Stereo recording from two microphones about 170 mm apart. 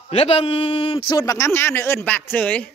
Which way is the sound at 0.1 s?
35° left (ahead or behind).